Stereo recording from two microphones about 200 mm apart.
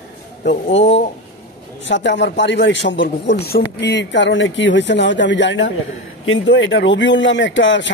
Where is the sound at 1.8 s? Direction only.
65° left (ahead or behind).